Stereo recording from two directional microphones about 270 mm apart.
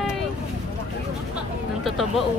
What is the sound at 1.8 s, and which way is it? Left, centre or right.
Speech, centre.